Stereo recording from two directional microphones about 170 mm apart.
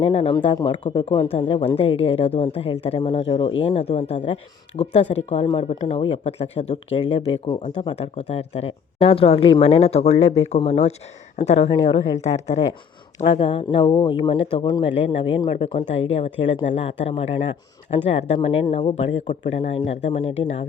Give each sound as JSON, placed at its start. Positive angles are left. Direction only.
{"t": 0.0, "sound": "speech", "side_deg": 30}